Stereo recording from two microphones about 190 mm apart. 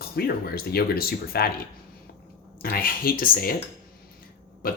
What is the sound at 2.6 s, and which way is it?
Speech, 50° left (ahead or behind).